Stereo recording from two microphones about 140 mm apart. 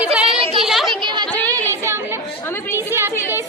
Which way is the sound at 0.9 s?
35° right (ahead or behind).